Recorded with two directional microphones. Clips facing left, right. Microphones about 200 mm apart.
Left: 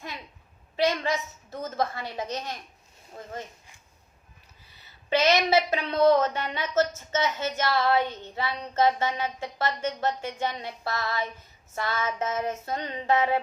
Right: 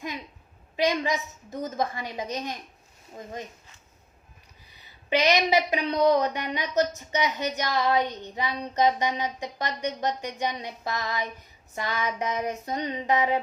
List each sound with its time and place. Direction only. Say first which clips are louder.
0.8 s a woman's voice: even; 15° right (ahead or behind)
4.7 s a woman's voice: even; 15° right (ahead or behind)